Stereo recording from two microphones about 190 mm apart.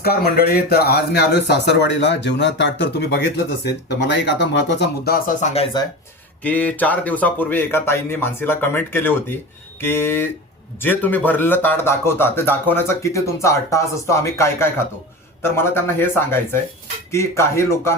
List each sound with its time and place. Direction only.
0.0 s speech: 55° left (ahead or behind)
5.0 s speech: 50° left (ahead or behind)
6.4 s speech: 10° left (ahead or behind)